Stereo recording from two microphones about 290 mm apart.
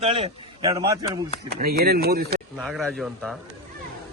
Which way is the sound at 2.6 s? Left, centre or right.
Centre.